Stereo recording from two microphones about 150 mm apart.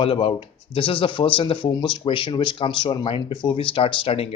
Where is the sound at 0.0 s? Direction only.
35° left (ahead or behind).